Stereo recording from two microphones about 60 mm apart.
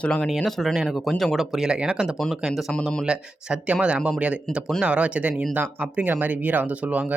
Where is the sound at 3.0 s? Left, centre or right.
Centre.